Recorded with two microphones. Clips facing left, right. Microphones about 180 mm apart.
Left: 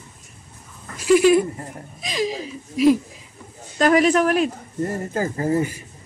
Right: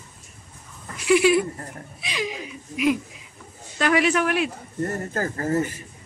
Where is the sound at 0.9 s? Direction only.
40° left (ahead or behind).